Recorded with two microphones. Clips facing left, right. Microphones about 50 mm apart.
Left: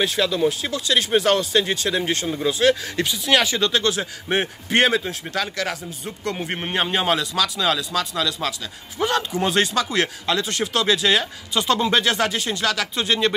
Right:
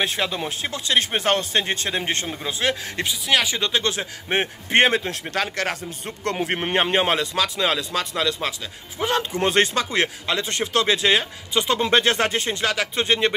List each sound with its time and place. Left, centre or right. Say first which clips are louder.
0.0 s speech: left 4 dB; right
2.3 s speech: left 6 dB; right
3.1 s speech: left 2 dB; centre; by 4.9 s right
5.0 s speech: right 1 dB; right
6.7 s speech: even; right
9.0 s speech: left 1 dB; centre
9.3 s speech: right 1 dB; right
9.9 s speech: left 1 dB; right
11.8 s speech: right 1 dB; right